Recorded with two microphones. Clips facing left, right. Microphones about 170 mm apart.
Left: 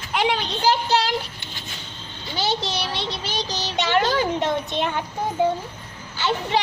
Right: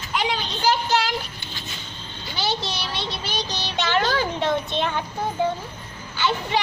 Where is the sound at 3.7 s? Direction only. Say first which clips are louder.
Left 2 dB; 15° left (ahead or behind).